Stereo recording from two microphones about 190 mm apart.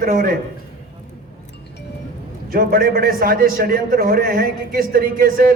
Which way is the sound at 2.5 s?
50° right (ahead or behind).